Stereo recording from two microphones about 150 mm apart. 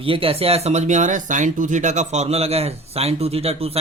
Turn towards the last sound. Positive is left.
turn(degrees=-40)  # may be behind; listen again after turning